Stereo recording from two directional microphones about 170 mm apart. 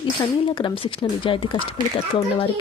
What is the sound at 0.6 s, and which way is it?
Speech, 25° left (ahead or behind).